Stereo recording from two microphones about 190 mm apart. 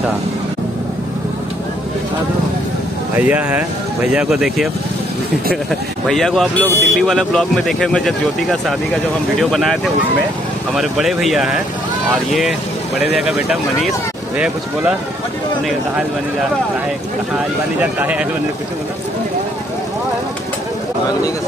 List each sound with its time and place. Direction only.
3.2 s speech: 10° right (ahead or behind)
5.7 s speech: centre (ahead or behind)
10.8 s speech: centre (ahead or behind)
13.0 s speech: 5° right (ahead or behind)
17.7 s speech: 10° right (ahead or behind)